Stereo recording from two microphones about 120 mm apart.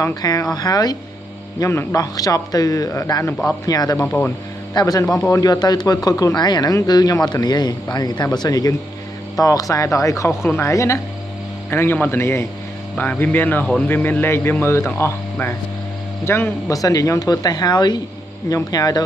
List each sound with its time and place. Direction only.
0.0 s speech: 30° left (ahead or behind)
1.6 s speech: 20° left (ahead or behind)
4.0 s a man's voice: 15° left (ahead or behind)
4.7 s a man's voice: 30° left (ahead or behind)